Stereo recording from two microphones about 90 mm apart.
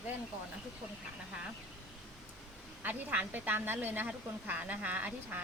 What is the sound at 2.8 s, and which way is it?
Speech, 20° right (ahead or behind).